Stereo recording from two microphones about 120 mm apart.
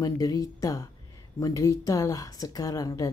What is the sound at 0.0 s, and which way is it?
A woman's voice, 30° left (ahead or behind).